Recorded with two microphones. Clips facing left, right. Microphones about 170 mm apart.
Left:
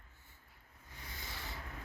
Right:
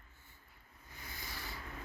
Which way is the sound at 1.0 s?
25° left (ahead or behind).